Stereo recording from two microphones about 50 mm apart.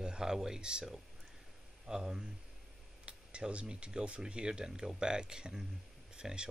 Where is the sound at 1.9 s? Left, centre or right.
Centre.